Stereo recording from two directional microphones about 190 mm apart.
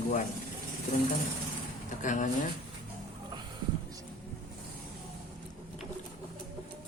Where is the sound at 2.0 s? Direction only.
40° left (ahead or behind).